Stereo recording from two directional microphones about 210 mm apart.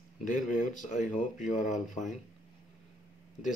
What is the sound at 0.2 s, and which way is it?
Speech, 40° left (ahead or behind).